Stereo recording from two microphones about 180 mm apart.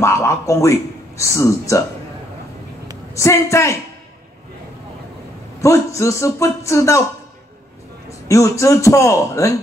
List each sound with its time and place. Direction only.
0.0 s a man's voice: 15° left (ahead or behind)
3.2 s speech: 15° left (ahead or behind)
5.6 s speech: 15° left (ahead or behind)
8.3 s speech: 15° left (ahead or behind)